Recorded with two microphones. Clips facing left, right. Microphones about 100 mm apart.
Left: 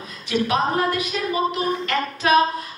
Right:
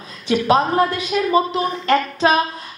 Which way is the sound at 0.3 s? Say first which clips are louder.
Right 3 dB; 30° right (ahead or behind).